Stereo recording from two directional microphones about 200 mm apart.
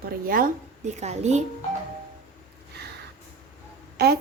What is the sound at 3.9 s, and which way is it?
Speech, 50° right (ahead or behind).